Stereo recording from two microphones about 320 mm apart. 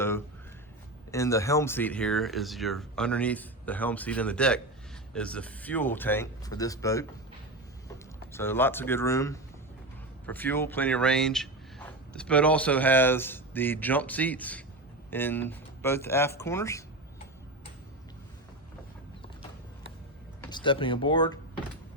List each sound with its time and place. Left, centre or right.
1.1 s speech: centre
8.3 s speech: centre
20.4 s speech: centre